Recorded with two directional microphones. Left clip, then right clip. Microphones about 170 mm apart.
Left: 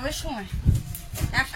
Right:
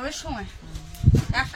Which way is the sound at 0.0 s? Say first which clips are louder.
Even; 25° left (ahead or behind).